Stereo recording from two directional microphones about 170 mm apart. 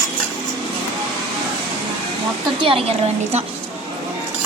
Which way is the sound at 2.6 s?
35° right (ahead or behind).